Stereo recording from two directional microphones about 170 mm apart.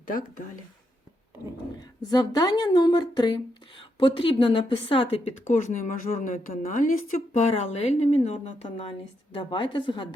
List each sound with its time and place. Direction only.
2.0 s speech: 25° left (ahead or behind)